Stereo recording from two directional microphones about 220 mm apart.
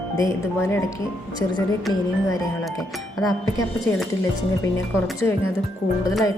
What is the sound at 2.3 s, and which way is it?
A woman's voice, 15° left (ahead or behind).